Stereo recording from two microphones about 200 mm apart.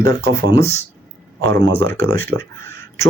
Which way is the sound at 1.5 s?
65° right (ahead or behind).